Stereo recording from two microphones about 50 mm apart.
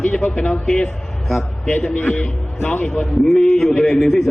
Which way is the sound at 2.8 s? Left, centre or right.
Centre.